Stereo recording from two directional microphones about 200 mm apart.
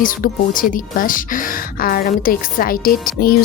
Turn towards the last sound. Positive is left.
turn(degrees=45)  # may be behind; listen again after turning